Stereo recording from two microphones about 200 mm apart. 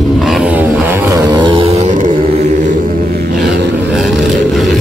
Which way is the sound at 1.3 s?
25° right (ahead or behind).